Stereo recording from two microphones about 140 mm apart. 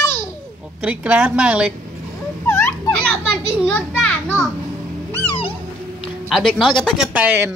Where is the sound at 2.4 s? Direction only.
20° left (ahead or behind).